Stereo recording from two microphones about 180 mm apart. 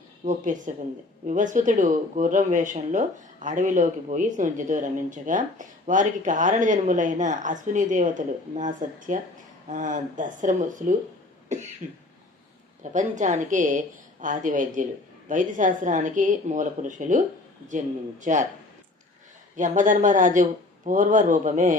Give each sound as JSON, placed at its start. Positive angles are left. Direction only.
{"t": 0.3, "sound": "speech", "side_deg": -45}
{"t": 11.5, "sound": "cough", "side_deg": -40}
{"t": 12.9, "sound": "speech", "side_deg": -45}
{"t": 19.5, "sound": "speech", "side_deg": -45}